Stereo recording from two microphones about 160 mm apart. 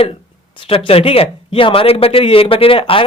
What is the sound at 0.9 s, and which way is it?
A man's voice, 35° left (ahead or behind).